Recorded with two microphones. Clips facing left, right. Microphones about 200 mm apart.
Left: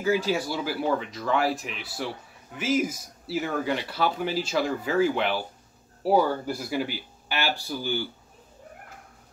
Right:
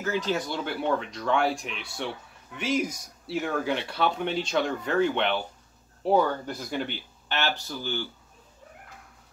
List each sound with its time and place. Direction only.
0.0 s speech: 10° left (ahead or behind)